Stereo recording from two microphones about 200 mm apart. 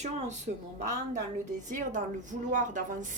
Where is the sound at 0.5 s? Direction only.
45° right (ahead or behind).